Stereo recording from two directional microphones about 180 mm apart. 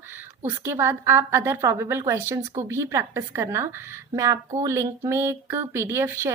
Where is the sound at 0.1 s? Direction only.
10° right (ahead or behind).